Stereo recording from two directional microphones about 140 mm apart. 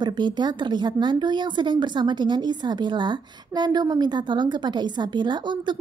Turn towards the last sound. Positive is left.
turn(degrees=-35)  # may be behind; listen again after turning